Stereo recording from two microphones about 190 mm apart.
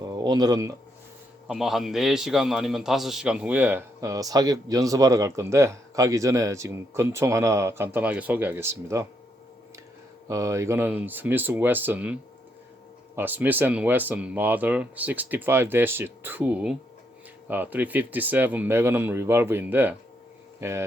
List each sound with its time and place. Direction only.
0.1 s speech: 20° right (ahead or behind)
1.5 s a man's voice: centre (ahead or behind)
10.2 s a man's voice: 15° right (ahead or behind)